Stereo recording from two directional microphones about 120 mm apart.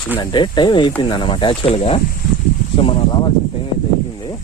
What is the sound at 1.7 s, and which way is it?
Speech, 55° left (ahead or behind).